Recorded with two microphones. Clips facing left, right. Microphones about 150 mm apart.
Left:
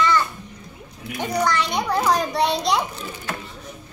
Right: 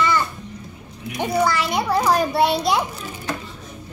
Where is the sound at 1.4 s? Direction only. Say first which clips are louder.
Right 1 dB; 5° right (ahead or behind).